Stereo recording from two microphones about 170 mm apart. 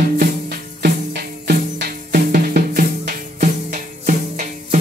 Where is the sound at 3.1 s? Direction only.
45° right (ahead or behind).